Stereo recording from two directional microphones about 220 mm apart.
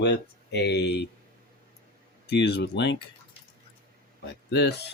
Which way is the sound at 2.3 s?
50° left (ahead or behind).